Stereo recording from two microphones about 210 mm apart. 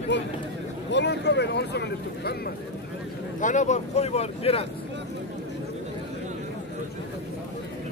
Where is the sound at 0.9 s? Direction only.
55° left (ahead or behind).